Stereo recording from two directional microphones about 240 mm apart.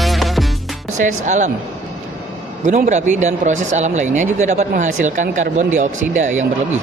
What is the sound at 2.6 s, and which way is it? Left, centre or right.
A man's voice, right.